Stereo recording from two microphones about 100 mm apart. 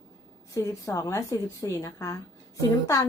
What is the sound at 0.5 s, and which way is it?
A woman's voice, 30° left (ahead or behind).